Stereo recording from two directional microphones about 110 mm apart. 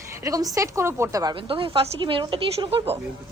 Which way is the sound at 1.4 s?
55° right (ahead or behind).